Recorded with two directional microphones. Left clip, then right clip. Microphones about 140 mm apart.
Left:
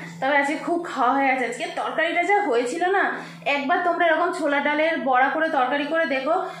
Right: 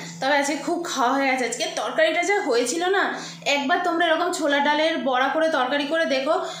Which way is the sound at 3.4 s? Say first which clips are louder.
Even; 25° right (ahead or behind).